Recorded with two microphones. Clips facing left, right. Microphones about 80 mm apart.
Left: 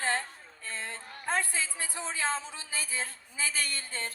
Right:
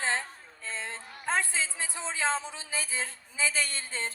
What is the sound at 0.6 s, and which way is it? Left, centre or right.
A woman's voice, right.